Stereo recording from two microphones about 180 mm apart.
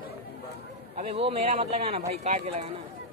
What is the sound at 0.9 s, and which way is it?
Speech, 35° right (ahead or behind).